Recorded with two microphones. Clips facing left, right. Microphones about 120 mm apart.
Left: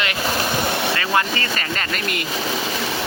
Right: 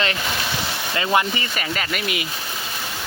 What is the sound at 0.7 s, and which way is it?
Speech, 60° left (ahead or behind).